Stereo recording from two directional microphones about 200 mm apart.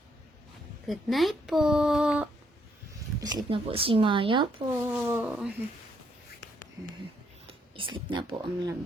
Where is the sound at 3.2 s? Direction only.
25° right (ahead or behind).